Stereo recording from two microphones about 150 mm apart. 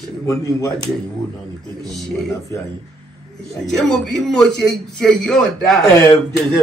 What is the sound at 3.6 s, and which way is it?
A man's voice, 5° left (ahead or behind).